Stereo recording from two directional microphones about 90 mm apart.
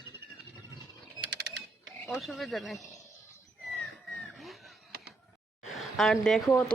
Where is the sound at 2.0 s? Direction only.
Centre (ahead or behind).